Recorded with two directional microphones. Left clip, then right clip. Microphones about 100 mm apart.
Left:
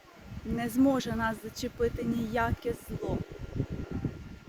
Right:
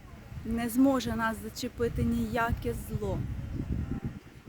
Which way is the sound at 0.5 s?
40° right (ahead or behind).